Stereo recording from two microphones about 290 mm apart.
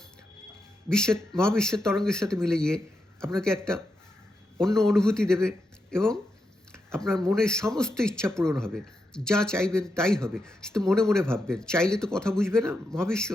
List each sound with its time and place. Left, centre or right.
0.9 s a man's voice: centre